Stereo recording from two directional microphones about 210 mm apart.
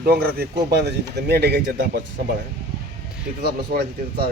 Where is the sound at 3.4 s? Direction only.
50° right (ahead or behind).